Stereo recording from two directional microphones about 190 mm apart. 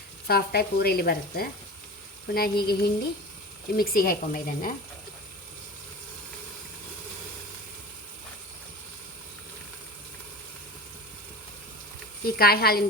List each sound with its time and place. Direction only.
0.3 s speech: 55° left (ahead or behind)
12.2 s speech: 55° left (ahead or behind)